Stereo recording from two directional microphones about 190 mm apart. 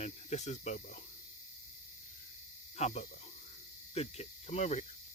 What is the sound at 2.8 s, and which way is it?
Speech, 35° left (ahead or behind).